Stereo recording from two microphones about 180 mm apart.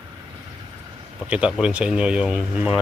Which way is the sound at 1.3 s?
5° right (ahead or behind).